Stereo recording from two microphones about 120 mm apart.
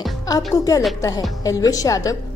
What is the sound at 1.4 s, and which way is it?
Speech, 30° left (ahead or behind).